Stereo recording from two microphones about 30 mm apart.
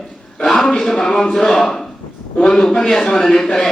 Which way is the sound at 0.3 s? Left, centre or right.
Centre.